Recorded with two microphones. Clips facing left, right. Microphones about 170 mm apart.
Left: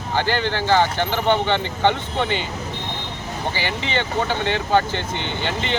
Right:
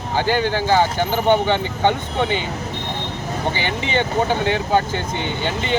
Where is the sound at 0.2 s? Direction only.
15° right (ahead or behind).